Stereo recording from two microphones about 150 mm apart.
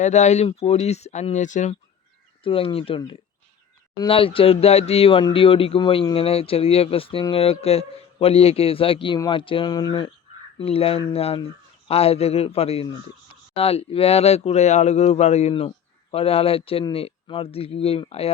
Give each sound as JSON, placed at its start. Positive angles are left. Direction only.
{"t": 0.0, "sound": "speech", "side_deg": 50}
{"t": 2.4, "sound": "speech", "side_deg": 35}
{"t": 10.6, "sound": "speech", "side_deg": 40}